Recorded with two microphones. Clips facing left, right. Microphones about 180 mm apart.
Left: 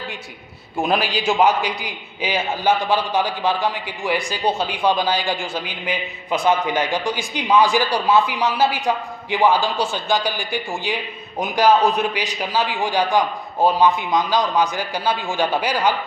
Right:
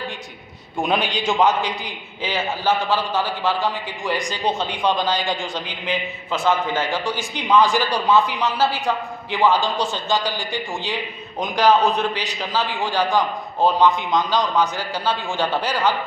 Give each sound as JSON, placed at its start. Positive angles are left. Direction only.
{"t": 0.8, "sound": "a man's voice", "side_deg": 5}
{"t": 10.9, "sound": "a man's voice", "side_deg": 10}